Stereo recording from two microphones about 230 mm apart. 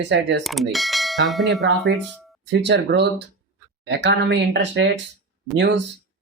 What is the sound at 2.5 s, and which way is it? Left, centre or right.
Speech, right.